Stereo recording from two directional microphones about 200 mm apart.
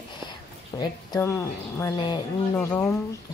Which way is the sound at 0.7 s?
15° left (ahead or behind).